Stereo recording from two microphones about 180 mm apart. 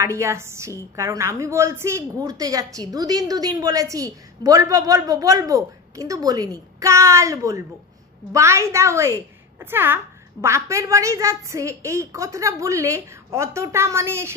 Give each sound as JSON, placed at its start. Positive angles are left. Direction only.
{"t": 0.0, "sound": "a woman's voice", "side_deg": -15}